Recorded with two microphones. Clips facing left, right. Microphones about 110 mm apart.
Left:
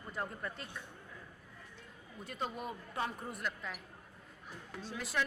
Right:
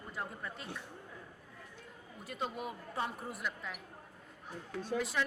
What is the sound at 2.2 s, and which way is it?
A woman's voice, 5° right (ahead or behind).